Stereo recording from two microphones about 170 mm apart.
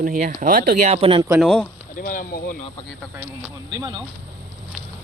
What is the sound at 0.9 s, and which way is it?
Speech, 35° right (ahead or behind).